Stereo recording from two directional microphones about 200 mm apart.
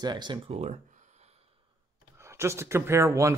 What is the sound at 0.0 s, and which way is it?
Speech, 20° right (ahead or behind).